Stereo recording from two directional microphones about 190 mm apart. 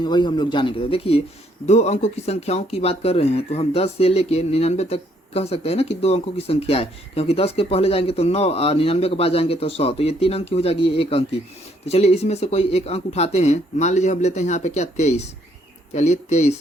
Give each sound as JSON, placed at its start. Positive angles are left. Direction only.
{"t": 0.0, "sound": "speech", "side_deg": 25}